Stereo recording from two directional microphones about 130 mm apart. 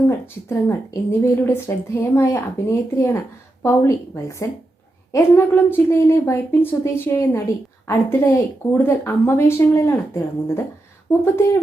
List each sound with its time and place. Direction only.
0.1 s a woman's voice: 20° left (ahead or behind)